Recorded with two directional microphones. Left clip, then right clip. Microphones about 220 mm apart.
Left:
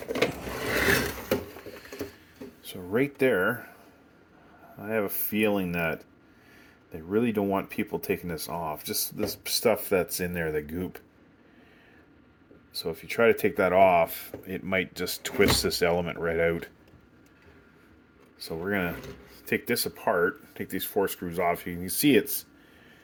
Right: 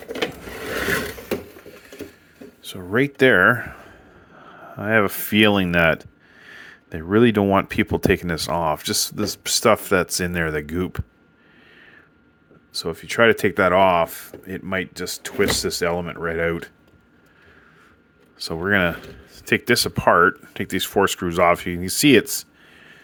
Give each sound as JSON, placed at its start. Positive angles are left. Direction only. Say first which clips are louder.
{"t": 2.6, "sound": "speech", "louder": "right 6 dB", "side_deg": -30}
{"t": 4.8, "sound": "speech", "louder": "right 11 dB", "side_deg": -40}
{"t": 12.7, "sound": "speech", "louder": "right 7 dB", "side_deg": -30}
{"t": 18.3, "sound": "speech", "louder": "right 10 dB", "side_deg": -35}